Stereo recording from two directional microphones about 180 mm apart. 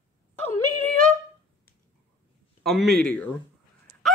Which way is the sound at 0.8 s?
5° left (ahead or behind).